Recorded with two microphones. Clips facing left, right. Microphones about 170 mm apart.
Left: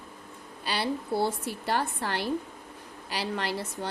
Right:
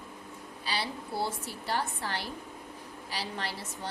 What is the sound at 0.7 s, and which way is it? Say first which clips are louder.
A woman's voice: left 6 dB; 55° left (ahead or behind).